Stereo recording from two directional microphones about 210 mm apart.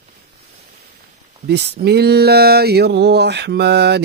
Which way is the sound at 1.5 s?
50° right (ahead or behind).